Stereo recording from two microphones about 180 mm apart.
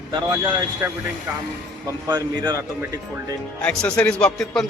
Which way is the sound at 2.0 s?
25° right (ahead or behind).